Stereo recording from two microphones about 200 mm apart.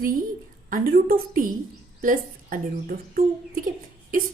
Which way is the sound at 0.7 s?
50° right (ahead or behind).